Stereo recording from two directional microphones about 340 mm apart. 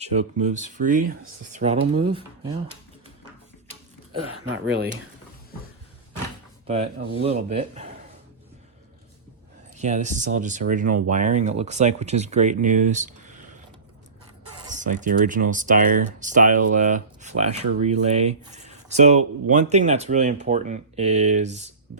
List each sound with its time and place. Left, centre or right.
0.0 s speech: centre
4.3 s speech: right
6.7 s speech: centre
9.7 s speech: right
14.6 s speech: right